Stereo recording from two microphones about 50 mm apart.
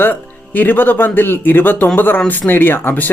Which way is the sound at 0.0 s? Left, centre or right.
Left.